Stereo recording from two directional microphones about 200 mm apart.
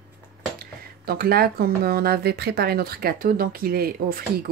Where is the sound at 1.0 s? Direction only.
50° right (ahead or behind).